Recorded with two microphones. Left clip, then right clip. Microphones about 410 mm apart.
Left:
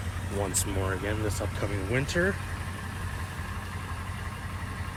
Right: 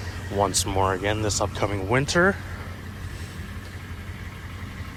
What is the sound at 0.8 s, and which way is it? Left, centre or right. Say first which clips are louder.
Speech: right 9 dB; centre.